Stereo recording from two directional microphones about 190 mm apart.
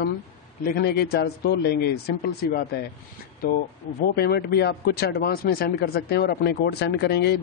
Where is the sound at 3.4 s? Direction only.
50° left (ahead or behind).